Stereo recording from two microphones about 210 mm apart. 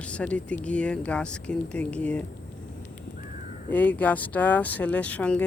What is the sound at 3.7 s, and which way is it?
Speech, 5° left (ahead or behind).